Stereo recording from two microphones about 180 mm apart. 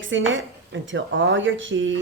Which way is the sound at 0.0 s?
90° right.